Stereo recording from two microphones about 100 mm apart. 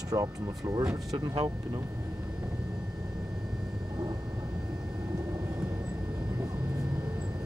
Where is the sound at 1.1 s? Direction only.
55° right (ahead or behind).